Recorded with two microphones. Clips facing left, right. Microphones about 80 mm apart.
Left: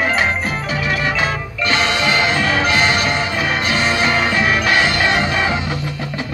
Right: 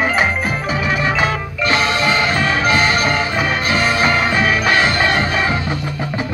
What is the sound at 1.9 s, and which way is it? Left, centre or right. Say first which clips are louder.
Music: right 1 dB; right.